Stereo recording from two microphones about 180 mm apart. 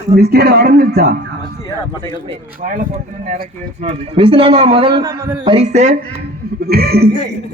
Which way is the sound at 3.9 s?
35° right (ahead or behind).